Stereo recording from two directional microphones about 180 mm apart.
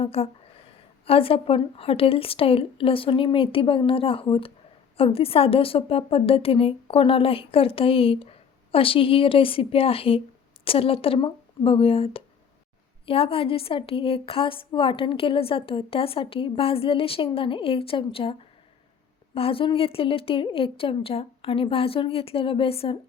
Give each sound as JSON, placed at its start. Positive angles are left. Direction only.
{"t": 0.0, "sound": "a woman's voice", "side_deg": 35}